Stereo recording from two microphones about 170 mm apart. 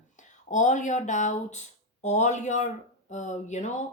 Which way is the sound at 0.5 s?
45° left (ahead or behind).